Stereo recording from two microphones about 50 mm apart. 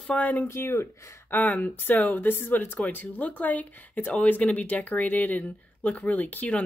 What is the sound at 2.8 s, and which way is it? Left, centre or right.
Speech, left.